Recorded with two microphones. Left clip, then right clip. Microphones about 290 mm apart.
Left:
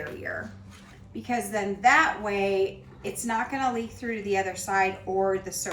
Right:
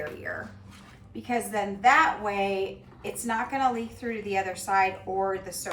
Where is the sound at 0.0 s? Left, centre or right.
Centre.